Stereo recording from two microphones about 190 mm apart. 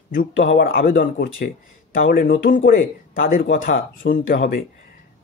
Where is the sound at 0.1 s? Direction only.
45° left (ahead or behind).